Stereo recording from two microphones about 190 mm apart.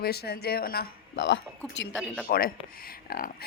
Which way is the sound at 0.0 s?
55° left (ahead or behind).